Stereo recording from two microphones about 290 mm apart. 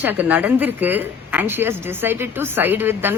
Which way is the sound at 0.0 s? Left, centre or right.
Centre.